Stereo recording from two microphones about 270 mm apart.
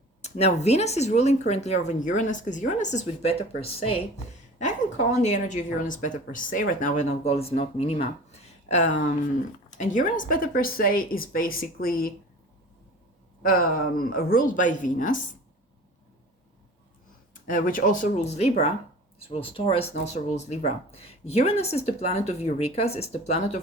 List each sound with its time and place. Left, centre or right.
0.2 s speech: left
5.1 s speech: left
13.4 s speech: left
17.4 s speech: left